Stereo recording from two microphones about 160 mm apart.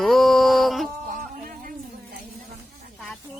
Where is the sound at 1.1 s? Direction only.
60° right (ahead or behind).